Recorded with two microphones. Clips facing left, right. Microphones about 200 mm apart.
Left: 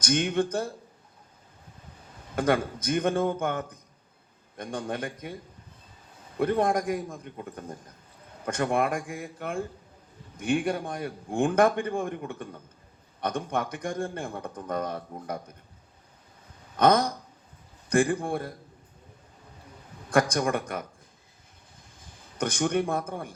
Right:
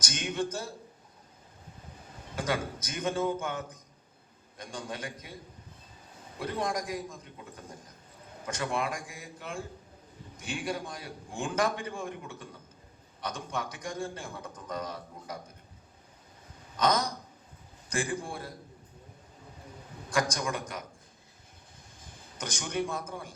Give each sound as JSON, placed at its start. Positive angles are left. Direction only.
{"t": 0.0, "sound": "a man's voice", "side_deg": 55}
{"t": 2.3, "sound": "a man's voice", "side_deg": 55}
{"t": 6.4, "sound": "a man's voice", "side_deg": 55}
{"t": 16.7, "sound": "a man's voice", "side_deg": 55}
{"t": 20.1, "sound": "a man's voice", "side_deg": 55}
{"t": 22.4, "sound": "a man's voice", "side_deg": 55}